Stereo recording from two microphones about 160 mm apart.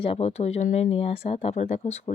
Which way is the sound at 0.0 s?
40° left (ahead or behind).